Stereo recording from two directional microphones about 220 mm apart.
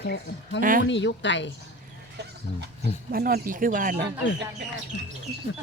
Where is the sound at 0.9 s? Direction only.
55° left (ahead or behind).